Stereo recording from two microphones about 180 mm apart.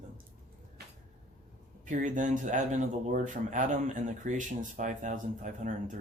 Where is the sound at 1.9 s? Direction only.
45° right (ahead or behind).